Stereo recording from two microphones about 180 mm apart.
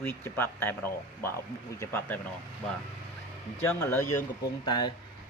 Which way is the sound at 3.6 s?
10° left (ahead or behind).